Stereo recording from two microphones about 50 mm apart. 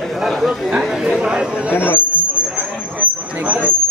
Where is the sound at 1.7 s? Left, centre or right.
Left.